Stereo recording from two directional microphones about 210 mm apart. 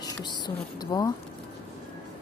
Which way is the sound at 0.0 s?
20° left (ahead or behind).